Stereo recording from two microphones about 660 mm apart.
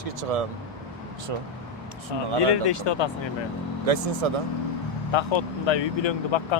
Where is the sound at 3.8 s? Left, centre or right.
Right.